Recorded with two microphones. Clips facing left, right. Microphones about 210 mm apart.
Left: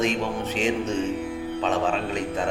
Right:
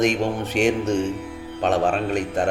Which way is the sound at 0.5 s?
70° right (ahead or behind).